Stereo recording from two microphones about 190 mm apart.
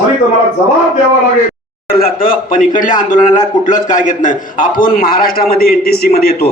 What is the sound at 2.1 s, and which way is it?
A man's voice, 45° left (ahead or behind).